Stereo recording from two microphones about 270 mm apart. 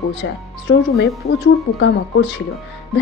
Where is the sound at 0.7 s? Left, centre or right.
Left.